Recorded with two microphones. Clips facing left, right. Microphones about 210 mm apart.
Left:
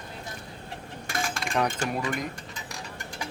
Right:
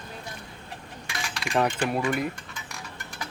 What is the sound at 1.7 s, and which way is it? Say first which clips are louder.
Speech: right 3 dB; 40° left (ahead or behind).